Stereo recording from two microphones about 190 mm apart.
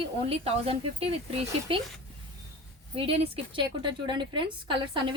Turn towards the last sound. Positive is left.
turn(degrees=-25)  # may be behind; listen again after turning